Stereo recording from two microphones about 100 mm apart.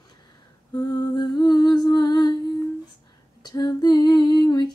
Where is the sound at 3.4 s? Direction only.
45° left (ahead or behind).